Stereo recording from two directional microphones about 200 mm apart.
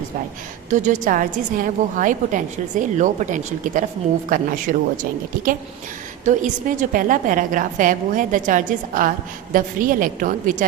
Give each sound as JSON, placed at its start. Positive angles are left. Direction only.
{"t": 0.7, "sound": "a woman's voice", "side_deg": -40}
{"t": 6.2, "sound": "a woman's voice", "side_deg": -40}